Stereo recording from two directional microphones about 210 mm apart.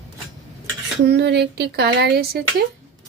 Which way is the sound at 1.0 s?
55° right (ahead or behind).